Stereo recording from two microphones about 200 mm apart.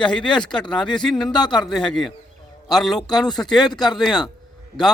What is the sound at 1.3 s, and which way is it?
Speech, 20° left (ahead or behind).